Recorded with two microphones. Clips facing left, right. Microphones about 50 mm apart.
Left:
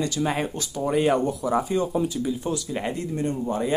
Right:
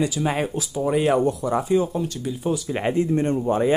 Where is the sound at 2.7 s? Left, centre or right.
Right.